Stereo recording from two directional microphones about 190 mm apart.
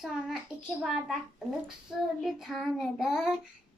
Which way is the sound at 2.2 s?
Centre (ahead or behind).